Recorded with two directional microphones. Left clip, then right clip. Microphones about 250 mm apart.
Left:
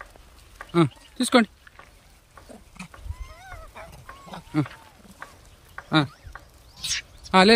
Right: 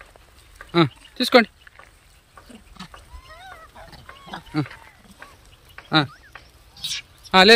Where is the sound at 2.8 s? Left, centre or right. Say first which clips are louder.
Right 4 dB; left.